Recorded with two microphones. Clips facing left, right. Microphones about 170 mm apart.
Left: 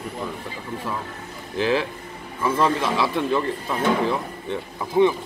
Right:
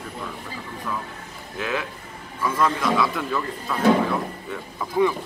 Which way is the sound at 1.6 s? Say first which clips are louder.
Left 6 dB; 30° left (ahead or behind).